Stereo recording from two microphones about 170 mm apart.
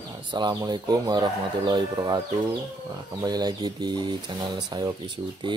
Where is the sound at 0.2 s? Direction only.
25° right (ahead or behind).